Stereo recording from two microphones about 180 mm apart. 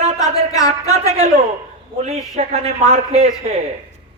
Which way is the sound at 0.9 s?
40° right (ahead or behind).